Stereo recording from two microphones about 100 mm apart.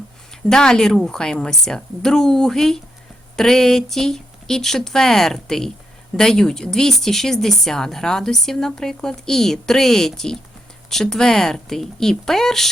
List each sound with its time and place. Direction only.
0.4 s speech: 5° left (ahead or behind)